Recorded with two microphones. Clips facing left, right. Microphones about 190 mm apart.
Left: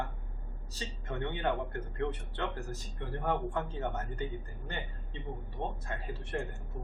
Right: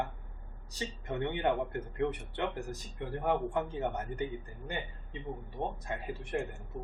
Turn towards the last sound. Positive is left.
turn(degrees=-15)  # may be behind; listen again after turning